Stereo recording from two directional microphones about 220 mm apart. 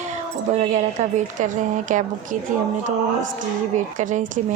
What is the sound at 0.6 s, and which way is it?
A woman's voice, 35° right (ahead or behind).